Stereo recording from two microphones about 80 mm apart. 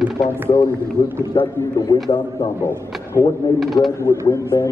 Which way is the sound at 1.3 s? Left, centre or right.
Left.